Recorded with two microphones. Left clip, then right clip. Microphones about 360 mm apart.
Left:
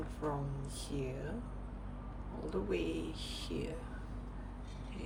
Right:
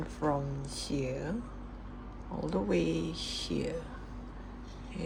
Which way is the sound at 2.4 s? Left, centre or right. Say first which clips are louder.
Right 6 dB; centre.